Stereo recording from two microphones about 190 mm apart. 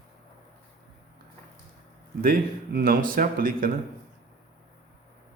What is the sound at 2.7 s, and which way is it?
Speech, 50° right (ahead or behind).